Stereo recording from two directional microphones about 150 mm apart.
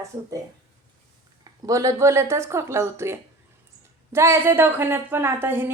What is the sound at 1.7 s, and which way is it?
A woman's voice, 20° right (ahead or behind).